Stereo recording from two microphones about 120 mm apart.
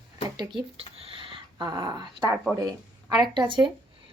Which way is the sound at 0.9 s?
50° right (ahead or behind).